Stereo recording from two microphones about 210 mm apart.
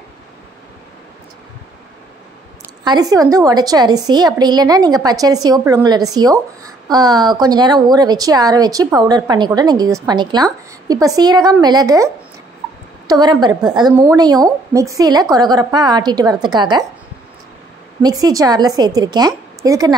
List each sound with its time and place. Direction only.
2.8 s a woman's voice: 20° right (ahead or behind)
18.0 s a woman's voice: 20° right (ahead or behind)